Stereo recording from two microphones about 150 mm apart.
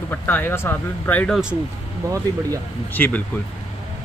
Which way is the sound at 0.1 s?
15° left (ahead or behind).